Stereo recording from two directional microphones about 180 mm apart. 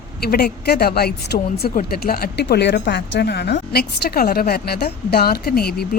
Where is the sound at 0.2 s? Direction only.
60° left (ahead or behind).